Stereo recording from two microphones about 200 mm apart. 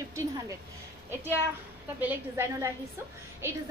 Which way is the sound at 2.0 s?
10° right (ahead or behind).